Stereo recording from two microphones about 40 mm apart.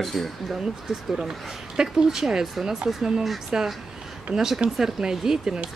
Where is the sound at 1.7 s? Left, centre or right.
Centre.